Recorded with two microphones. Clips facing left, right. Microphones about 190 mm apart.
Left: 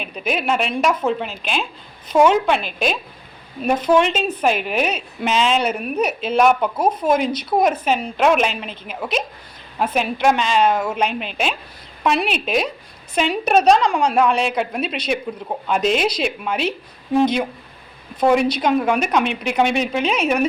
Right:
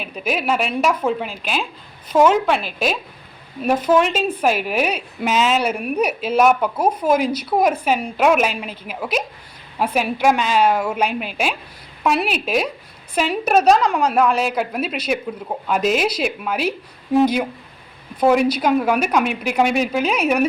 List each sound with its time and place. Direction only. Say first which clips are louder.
0.0 s a woman's voice: even; 5° right (ahead or behind)